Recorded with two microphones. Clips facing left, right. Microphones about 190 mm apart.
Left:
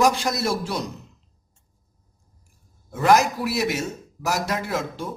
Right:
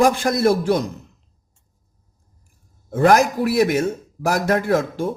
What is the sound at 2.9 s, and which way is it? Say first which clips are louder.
A man's voice: right 3 dB; 50° right (ahead or behind).